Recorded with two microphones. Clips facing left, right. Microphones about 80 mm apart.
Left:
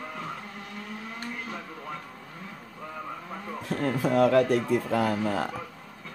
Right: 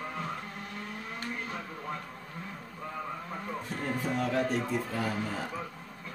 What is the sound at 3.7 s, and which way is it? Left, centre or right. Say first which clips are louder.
Speech: left 9 dB; left.